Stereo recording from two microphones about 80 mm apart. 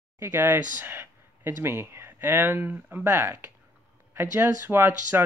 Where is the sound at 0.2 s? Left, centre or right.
Right.